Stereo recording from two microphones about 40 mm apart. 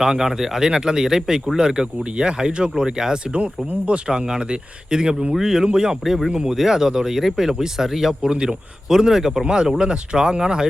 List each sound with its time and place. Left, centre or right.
0.0 s speech: centre